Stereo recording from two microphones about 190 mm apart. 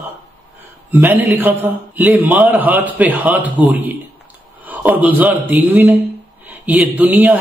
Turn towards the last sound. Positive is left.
turn(degrees=-10)  # may be behind; listen again after turning